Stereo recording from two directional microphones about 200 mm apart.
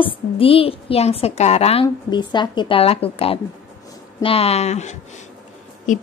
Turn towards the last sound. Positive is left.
turn(degrees=40)  # may be behind; listen again after turning